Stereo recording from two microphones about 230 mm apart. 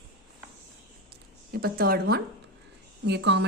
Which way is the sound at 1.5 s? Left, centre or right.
Right.